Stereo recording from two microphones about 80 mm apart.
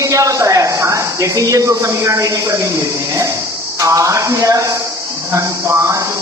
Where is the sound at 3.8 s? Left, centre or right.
Right.